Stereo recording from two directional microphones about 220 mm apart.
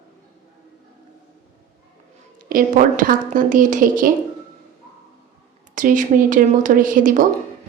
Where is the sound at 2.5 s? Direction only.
35° right (ahead or behind).